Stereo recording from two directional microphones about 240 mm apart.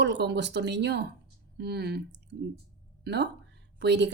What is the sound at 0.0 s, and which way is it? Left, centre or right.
A woman's voice, right.